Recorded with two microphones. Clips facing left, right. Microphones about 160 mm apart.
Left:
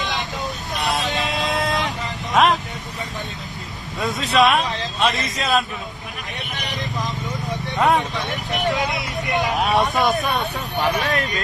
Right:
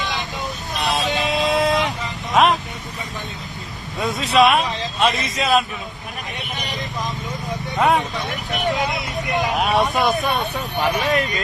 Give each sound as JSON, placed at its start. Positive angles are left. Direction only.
{"t": 0.8, "sound": "a sound", "side_deg": 0}
{"t": 2.3, "sound": "vehicle", "side_deg": 0}
{"t": 3.9, "sound": "speech", "side_deg": 0}
{"t": 7.3, "sound": "vehicle", "side_deg": 0}
{"t": 8.6, "sound": "speech", "side_deg": -20}
{"t": 8.9, "sound": "vehicle", "side_deg": 0}
{"t": 9.3, "sound": "speech", "side_deg": 0}